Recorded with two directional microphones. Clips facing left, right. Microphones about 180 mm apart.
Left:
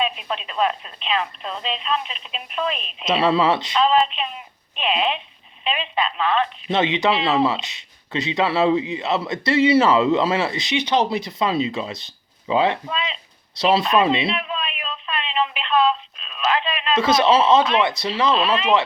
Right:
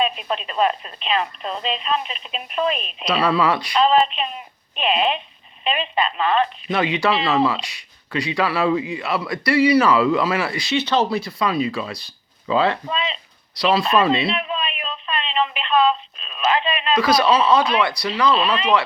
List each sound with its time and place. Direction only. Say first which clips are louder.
0.0 s speech: right 2 dB; centre (ahead or behind)
3.1 s speech: left 1 dB; 25° left (ahead or behind)
3.8 s speech: right 3 dB; centre (ahead or behind)
6.7 s speech: left 3 dB; 25° left (ahead or behind)
12.9 s speech: right 2 dB; centre (ahead or behind)
13.6 s speech: even; 25° left (ahead or behind)
14.3 s telephone: right 2 dB; centre (ahead or behind)
16.9 s speech: even; 25° left (ahead or behind)
18.3 s speech: even; centre (ahead or behind)